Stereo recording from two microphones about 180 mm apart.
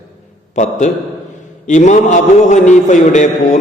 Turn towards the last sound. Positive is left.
turn(degrees=40)  # may be behind; listen again after turning